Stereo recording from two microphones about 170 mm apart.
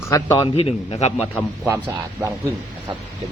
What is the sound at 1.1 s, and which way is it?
A man's voice, 10° right (ahead or behind).